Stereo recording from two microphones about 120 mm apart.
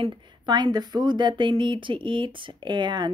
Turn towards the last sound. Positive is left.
turn(degrees=-40)  # may be behind; listen again after turning